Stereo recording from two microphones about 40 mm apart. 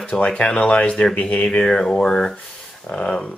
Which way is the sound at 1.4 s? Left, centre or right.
Centre.